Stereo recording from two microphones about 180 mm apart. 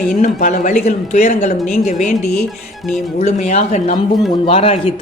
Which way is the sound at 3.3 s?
40° left (ahead or behind).